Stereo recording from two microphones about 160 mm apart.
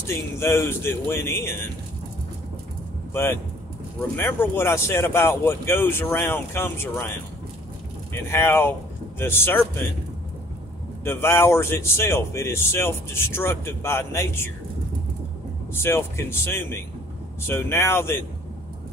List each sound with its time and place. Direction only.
0.0 s speech: 15° left (ahead or behind)
3.1 s speech: 15° left (ahead or behind)
8.3 s speech: 15° left (ahead or behind)
11.1 s speech: 15° left (ahead or behind)
15.7 s speech: 15° left (ahead or behind)